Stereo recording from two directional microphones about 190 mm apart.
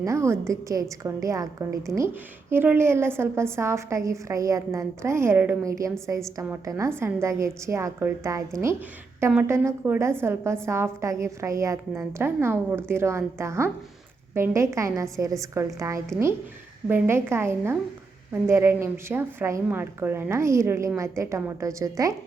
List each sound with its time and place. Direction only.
0.0 s a woman's voice: 15° right (ahead or behind)